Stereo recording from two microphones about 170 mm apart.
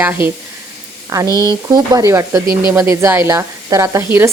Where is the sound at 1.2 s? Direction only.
20° left (ahead or behind).